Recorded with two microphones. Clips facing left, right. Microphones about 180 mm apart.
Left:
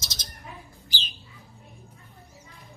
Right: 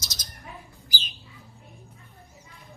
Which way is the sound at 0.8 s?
25° left (ahead or behind).